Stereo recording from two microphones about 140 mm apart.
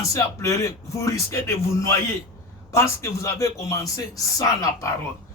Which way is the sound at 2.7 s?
20° left (ahead or behind).